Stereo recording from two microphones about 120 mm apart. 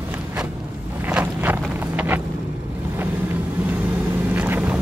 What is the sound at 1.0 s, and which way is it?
Walk, 15° right (ahead or behind).